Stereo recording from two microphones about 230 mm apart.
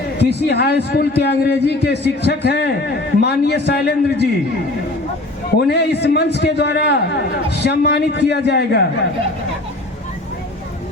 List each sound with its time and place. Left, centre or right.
0.2 s a man's voice: left
5.5 s a man's voice: left